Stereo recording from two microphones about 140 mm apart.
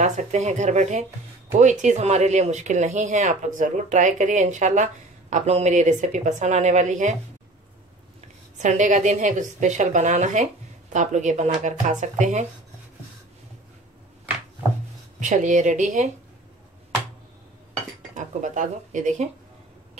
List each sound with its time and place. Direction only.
0.0 s a woman's voice: 55° right (ahead or behind)
8.5 s a woman's voice: 60° right (ahead or behind)
15.1 s a woman's voice: 65° right (ahead or behind)
18.1 s speech: 60° right (ahead or behind)